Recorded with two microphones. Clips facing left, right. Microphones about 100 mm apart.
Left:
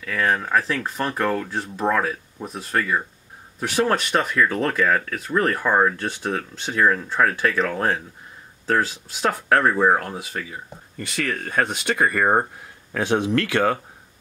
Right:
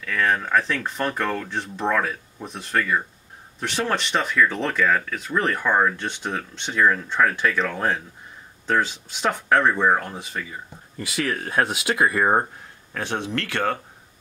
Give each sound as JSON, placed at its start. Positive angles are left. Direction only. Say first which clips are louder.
{"t": 0.0, "sound": "speech", "louder": "even", "side_deg": 5}
{"t": 12.9, "sound": "speech", "louder": "left 6 dB", "side_deg": 15}